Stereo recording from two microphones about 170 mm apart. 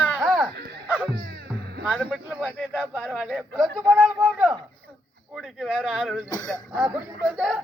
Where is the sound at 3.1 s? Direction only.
Centre (ahead or behind).